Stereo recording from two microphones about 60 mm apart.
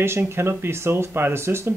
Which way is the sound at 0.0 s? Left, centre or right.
Right.